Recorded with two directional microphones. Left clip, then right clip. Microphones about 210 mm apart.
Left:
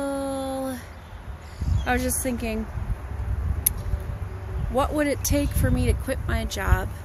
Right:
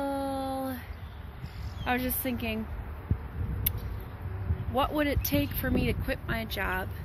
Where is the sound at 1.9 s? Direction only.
20° left (ahead or behind).